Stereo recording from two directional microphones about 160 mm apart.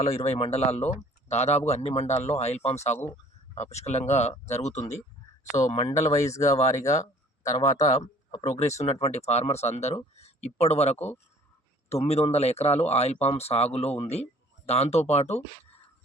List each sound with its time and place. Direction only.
0.0 s speech: 40° left (ahead or behind)
6.3 s speech: 20° left (ahead or behind)
6.6 s speech: 45° left (ahead or behind)
6.9 s a sound: 20° left (ahead or behind)
7.9 s speech: 45° left (ahead or behind)